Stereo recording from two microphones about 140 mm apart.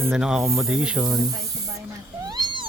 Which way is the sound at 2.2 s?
30° right (ahead or behind).